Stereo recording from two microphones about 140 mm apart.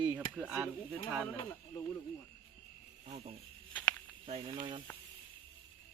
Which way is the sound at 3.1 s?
50° right (ahead or behind).